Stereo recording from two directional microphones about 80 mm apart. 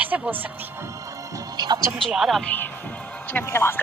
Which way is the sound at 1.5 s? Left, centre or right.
Right.